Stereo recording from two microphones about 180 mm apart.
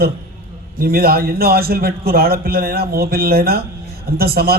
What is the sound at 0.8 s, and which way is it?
A man's voice, 55° right (ahead or behind).